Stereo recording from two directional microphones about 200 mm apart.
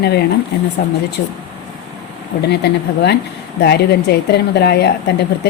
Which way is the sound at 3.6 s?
55° left (ahead or behind).